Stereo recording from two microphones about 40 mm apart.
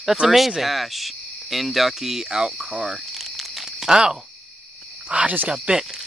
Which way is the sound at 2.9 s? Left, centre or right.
Centre.